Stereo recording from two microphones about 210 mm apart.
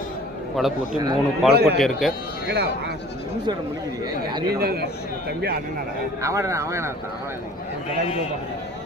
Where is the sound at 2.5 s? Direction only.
55° right (ahead or behind).